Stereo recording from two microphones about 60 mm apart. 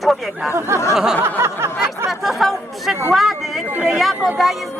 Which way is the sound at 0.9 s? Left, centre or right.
Centre.